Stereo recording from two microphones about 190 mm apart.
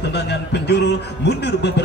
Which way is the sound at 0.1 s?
60° left (ahead or behind).